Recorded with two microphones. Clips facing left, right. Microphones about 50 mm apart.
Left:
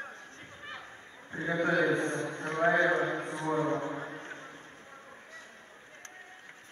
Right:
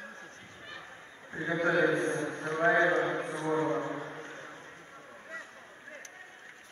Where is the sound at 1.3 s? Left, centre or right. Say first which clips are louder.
Even; centre.